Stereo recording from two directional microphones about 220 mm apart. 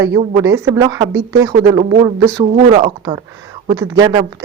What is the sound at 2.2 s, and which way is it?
Speech, 15° right (ahead or behind).